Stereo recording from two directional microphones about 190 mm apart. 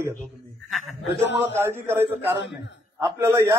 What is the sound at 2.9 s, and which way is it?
Speech, 15° right (ahead or behind).